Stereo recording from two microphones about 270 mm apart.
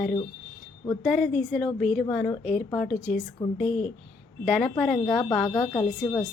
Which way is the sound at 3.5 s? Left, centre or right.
Centre.